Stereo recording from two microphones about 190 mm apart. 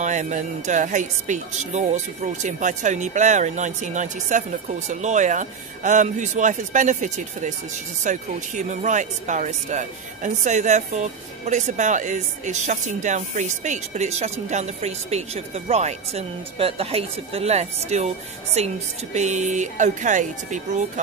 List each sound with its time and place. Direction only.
0.0 s speech: 40° right (ahead or behind)